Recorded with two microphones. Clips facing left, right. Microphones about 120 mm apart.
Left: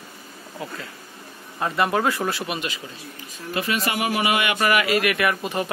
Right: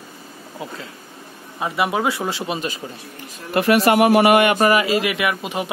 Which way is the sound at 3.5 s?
70° right (ahead or behind).